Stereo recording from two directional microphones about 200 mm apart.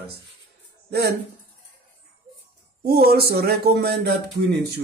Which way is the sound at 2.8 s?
50° right (ahead or behind).